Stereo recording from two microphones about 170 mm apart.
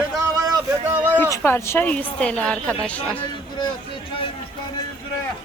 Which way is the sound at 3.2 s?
25° left (ahead or behind).